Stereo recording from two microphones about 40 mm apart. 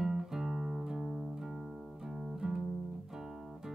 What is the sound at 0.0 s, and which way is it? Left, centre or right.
Music, centre.